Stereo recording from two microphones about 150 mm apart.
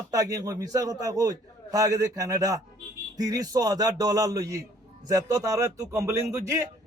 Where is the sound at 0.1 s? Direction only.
25° right (ahead or behind).